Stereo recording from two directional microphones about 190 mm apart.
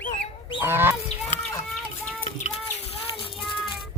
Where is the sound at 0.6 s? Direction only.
10° right (ahead or behind).